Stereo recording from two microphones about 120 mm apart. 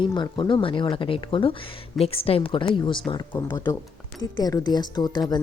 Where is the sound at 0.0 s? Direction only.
40° left (ahead or behind).